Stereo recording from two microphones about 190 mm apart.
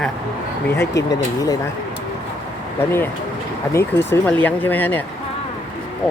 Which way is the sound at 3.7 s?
10° left (ahead or behind).